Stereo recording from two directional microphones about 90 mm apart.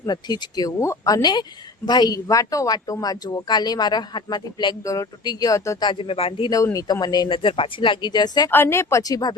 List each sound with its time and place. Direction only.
0.0 s speech: 50° left (ahead or behind)
5.8 s speech: 75° left (ahead or behind)
6.7 s speech: 45° left (ahead or behind)
8.4 s speech: 25° left (ahead or behind); by 9.3 s 45° left (ahead or behind)